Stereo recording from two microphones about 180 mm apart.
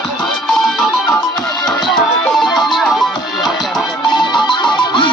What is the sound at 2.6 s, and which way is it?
Music, centre (ahead or behind).